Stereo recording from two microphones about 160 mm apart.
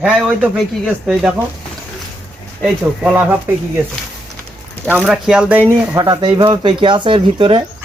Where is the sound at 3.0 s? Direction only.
10° right (ahead or behind).